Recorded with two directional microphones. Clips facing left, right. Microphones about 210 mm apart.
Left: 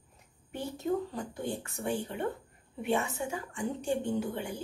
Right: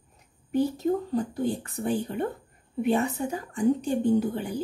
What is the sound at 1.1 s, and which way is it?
A woman's voice, 35° right (ahead or behind).